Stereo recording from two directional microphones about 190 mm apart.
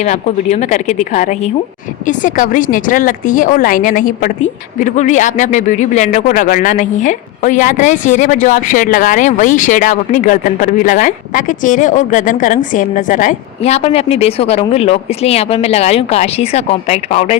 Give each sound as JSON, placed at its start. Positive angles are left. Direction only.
{"t": 0.0, "sound": "a woman's voice", "side_deg": 35}